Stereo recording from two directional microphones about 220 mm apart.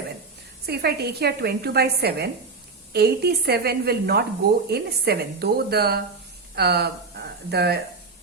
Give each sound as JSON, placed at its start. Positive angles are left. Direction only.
{"t": 0.6, "sound": "a woman's voice", "side_deg": -45}